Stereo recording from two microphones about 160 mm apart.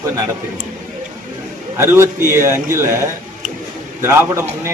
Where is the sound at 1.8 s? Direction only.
15° right (ahead or behind).